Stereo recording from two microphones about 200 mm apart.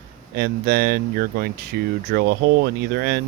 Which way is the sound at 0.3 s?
50° right (ahead or behind).